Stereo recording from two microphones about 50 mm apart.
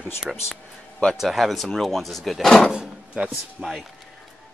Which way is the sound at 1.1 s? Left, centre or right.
Centre.